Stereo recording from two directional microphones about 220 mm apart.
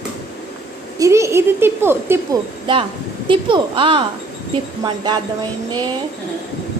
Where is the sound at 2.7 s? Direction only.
20° right (ahead or behind).